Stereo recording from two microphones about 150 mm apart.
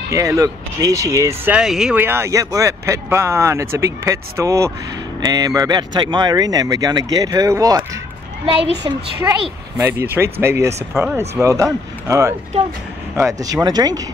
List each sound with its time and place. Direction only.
0.1 s speech: 20° right (ahead or behind)
1.5 s speech: 5° right (ahead or behind)
2.0 s speech: 15° right (ahead or behind)
9.8 s speech: 15° right (ahead or behind)
10.9 s speech: 5° right (ahead or behind)
11.4 s speech: 20° right (ahead or behind)